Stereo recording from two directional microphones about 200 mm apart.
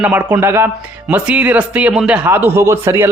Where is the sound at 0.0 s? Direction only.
5° right (ahead or behind).